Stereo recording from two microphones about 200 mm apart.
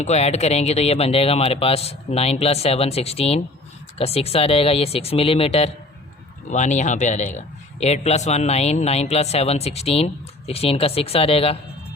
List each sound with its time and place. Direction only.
0.0 s speech: 35° left (ahead or behind)